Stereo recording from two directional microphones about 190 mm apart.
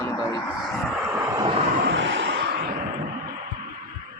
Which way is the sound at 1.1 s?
20° right (ahead or behind).